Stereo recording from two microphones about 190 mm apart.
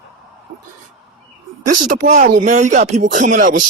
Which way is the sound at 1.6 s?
45° right (ahead or behind).